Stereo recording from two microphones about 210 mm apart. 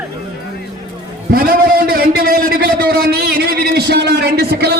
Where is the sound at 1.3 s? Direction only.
45° right (ahead or behind).